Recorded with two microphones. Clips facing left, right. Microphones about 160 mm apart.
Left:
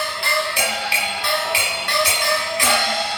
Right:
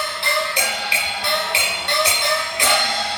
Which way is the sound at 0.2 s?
20° right (ahead or behind).